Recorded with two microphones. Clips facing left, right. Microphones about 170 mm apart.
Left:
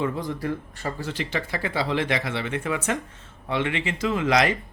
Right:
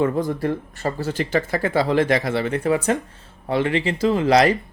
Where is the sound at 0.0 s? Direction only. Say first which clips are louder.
Right 6 dB; 45° right (ahead or behind).